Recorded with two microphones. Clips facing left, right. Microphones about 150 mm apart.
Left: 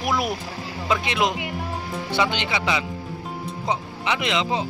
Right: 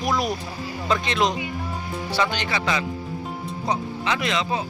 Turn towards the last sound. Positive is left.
turn(degrees=20)  # may be behind; listen again after turning